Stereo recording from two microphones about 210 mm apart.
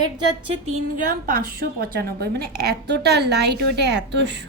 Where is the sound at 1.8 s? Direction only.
50° right (ahead or behind).